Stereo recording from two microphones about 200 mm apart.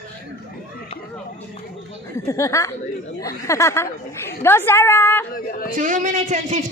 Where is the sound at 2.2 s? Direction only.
15° left (ahead or behind).